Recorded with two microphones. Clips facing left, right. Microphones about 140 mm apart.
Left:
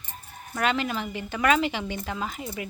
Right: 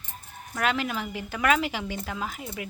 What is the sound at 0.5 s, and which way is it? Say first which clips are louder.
Speech: left 1 dB; 5° right (ahead or behind).